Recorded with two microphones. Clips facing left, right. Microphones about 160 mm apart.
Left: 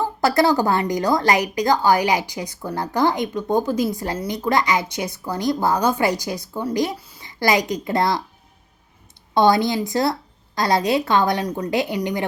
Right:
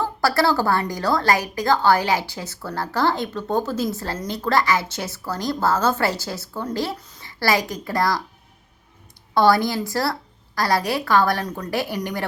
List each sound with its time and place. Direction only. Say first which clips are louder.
0.0 s a woman's voice: left 2 dB; 20° left (ahead or behind)
9.3 s a woman's voice: left 1 dB; 20° left (ahead or behind)